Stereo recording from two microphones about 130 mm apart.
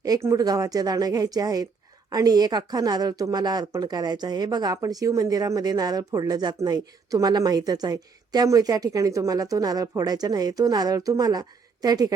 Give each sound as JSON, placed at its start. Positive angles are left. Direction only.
{"t": 0.0, "sound": "a woman's voice", "side_deg": -25}